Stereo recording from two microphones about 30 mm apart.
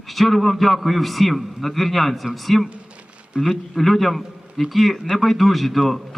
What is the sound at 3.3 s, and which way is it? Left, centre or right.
Speech, right.